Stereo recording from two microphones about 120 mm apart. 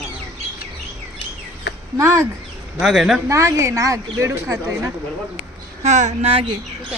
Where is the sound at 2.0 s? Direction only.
25° right (ahead or behind).